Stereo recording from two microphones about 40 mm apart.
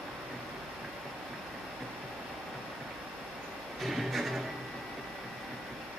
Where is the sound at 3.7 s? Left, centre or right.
Centre.